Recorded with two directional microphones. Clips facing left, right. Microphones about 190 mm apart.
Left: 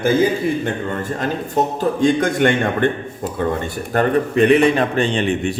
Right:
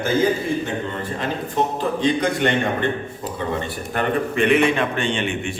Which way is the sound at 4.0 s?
35° left (ahead or behind).